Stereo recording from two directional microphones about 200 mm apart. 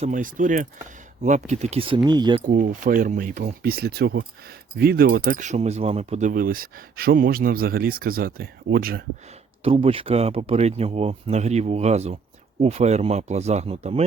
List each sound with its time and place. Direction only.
0.0 s speech: 40° right (ahead or behind); by 2.4 s 20° right (ahead or behind)
2.5 s speech: 40° right (ahead or behind)
9.6 s speech: 30° right (ahead or behind)